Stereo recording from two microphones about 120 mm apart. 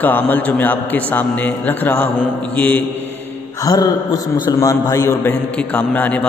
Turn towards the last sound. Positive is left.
turn(degrees=15)  # may be behind; listen again after turning